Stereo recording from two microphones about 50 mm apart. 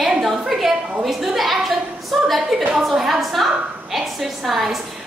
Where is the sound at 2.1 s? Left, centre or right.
Centre.